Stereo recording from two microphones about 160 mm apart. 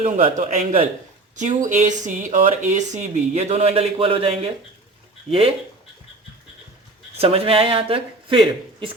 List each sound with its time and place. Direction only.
0.0 s a man's voice: 40° right (ahead or behind)
7.2 s a man's voice: 40° right (ahead or behind)